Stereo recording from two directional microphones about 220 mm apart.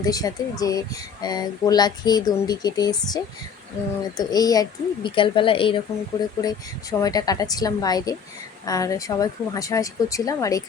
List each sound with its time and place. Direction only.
0.0 s speech: 15° left (ahead or behind)
4.2 s a woman's voice: 15° left (ahead or behind)